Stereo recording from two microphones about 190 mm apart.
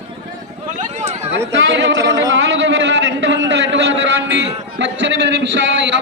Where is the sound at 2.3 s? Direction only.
70° right (ahead or behind).